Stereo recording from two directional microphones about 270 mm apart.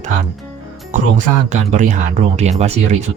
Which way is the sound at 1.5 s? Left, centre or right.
Right.